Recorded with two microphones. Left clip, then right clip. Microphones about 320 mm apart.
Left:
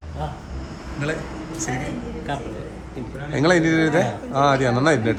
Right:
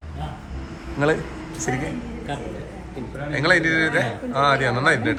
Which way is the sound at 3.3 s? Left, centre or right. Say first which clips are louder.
Even; centre.